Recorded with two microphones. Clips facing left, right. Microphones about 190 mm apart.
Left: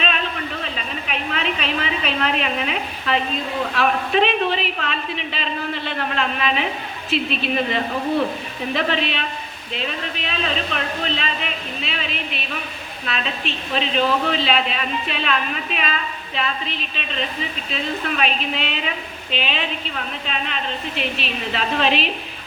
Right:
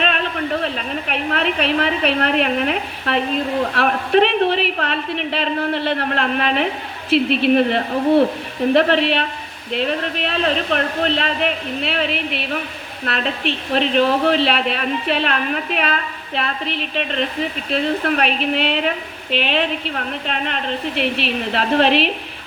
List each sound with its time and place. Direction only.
0.6 s a woman's voice: 65° right (ahead or behind)